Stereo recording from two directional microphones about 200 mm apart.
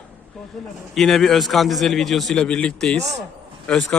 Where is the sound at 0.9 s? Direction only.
Centre (ahead or behind).